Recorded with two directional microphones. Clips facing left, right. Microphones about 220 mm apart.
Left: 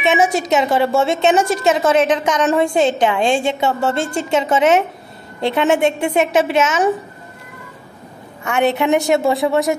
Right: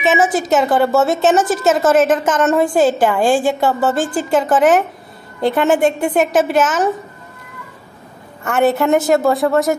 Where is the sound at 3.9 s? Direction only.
25° left (ahead or behind).